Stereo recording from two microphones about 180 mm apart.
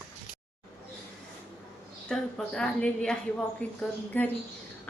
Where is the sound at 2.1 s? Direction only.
5° left (ahead or behind).